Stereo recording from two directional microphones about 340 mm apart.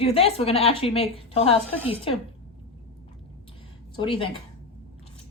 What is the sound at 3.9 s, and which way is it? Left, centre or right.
Speech, centre.